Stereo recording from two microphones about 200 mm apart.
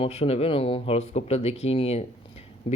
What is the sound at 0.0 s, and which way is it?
Speech, 30° left (ahead or behind).